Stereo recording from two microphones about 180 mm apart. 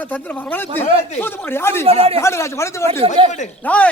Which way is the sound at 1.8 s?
35° right (ahead or behind).